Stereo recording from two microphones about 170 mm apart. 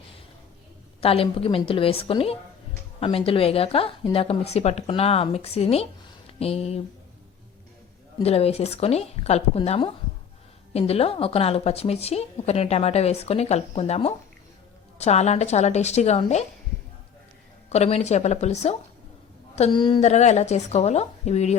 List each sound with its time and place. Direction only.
1.0 s speech: 35° left (ahead or behind)
8.2 s speech: 35° left (ahead or behind)
17.7 s speech: 40° left (ahead or behind)